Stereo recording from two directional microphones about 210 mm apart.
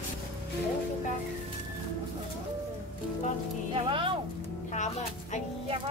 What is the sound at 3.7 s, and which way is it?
Speech, 25° right (ahead or behind).